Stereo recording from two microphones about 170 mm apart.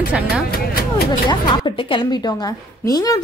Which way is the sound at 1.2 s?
30° left (ahead or behind).